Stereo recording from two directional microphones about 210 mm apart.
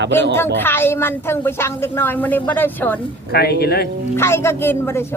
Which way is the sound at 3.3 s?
50° left (ahead or behind).